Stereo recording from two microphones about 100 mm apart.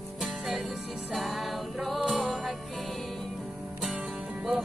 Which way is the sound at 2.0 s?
5° right (ahead or behind).